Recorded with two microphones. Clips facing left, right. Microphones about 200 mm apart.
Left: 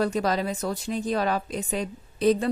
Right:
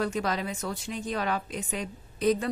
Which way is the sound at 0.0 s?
35° left (ahead or behind).